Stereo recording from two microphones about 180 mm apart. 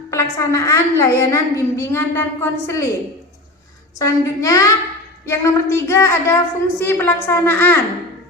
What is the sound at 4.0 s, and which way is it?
A woman's voice, 20° left (ahead or behind).